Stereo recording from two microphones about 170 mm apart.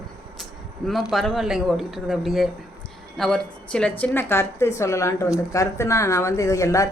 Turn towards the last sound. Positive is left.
turn(degrees=20)  # may be behind; listen again after turning